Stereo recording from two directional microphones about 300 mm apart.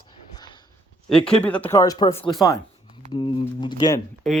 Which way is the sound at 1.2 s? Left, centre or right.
Centre.